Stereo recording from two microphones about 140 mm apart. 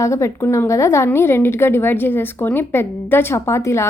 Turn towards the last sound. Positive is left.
turn(degrees=20)  # may be behind; listen again after turning